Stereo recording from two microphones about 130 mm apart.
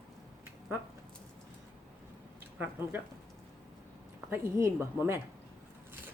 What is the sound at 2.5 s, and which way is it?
Speech, 15° right (ahead or behind).